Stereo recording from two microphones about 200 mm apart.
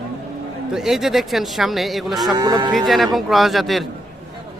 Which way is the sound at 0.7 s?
Centre (ahead or behind).